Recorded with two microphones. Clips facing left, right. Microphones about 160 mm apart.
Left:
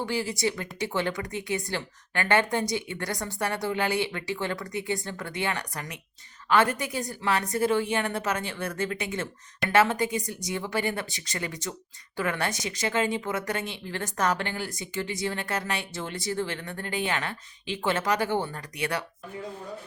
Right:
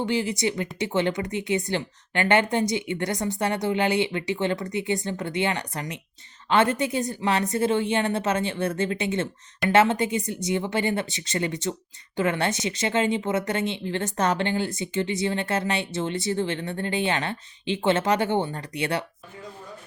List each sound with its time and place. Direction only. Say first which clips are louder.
0.0 s speech: right 3 dB; 20° right (ahead or behind)